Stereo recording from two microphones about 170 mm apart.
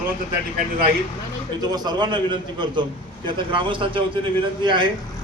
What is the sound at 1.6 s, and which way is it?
A man's voice, 25° right (ahead or behind).